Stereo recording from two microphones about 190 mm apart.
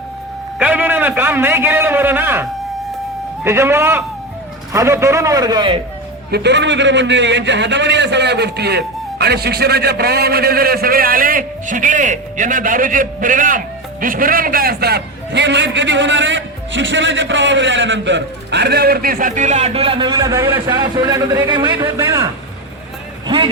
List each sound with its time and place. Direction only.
0.6 s a sound: 10° right (ahead or behind)
3.4 s a man's voice: 15° right (ahead or behind)
6.3 s a man's voice: 65° right (ahead or behind); by 22.3 s 15° right (ahead or behind)
23.2 s music: 25° right (ahead or behind)